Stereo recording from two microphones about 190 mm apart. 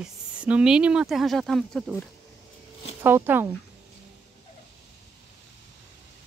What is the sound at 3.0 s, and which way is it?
Speech, 10° right (ahead or behind).